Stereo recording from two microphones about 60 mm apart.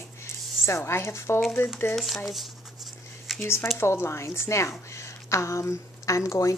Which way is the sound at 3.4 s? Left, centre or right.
Left.